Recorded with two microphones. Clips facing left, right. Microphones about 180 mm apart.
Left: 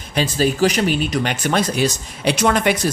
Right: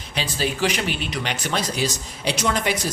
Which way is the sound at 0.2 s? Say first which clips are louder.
Left 7 dB; 45° left (ahead or behind).